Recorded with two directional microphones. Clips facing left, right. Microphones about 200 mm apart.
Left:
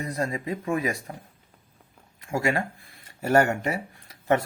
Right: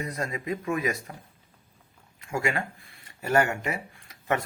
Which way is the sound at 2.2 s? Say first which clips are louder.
Left 3 dB; 35° left (ahead or behind).